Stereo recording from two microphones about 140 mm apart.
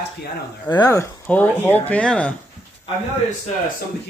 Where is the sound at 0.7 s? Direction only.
25° left (ahead or behind); by 2.3 s 10° left (ahead or behind).